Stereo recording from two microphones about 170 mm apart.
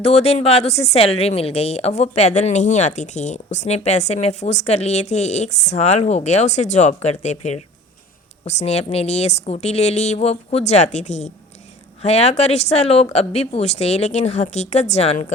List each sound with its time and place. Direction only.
0.0 s speech: 35° left (ahead or behind)